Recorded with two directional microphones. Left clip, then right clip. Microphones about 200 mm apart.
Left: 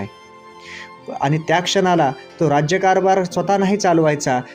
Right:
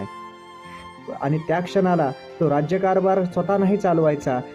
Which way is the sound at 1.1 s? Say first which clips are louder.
Left 5 dB; 15° left (ahead or behind).